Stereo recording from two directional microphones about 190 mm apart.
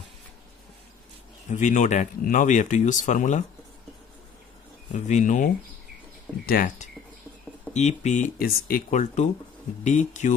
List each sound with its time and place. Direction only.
1.5 s speech: 40° left (ahead or behind)
4.9 s speech: 40° left (ahead or behind)
7.7 s speech: 35° left (ahead or behind)